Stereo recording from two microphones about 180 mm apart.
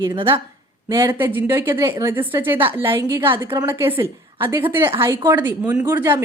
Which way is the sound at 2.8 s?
25° right (ahead or behind).